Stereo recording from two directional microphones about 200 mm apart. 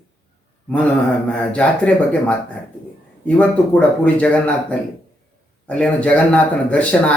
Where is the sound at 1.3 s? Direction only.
5° left (ahead or behind).